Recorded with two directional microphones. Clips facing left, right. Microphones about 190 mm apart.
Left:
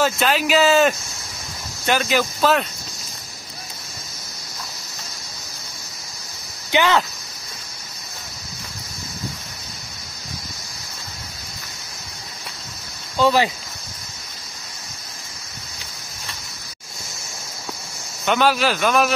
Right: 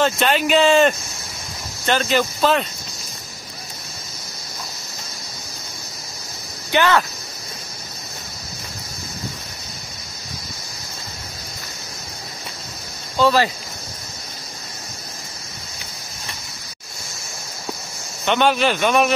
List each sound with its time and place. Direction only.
0.0 s speech: centre (ahead or behind)
6.7 s speech: 15° left (ahead or behind)
13.2 s speech: 15° left (ahead or behind)
18.2 s speech: 5° left (ahead or behind)